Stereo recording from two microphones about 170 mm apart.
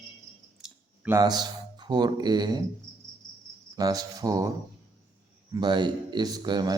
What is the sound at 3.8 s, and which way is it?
Speech, 20° right (ahead or behind).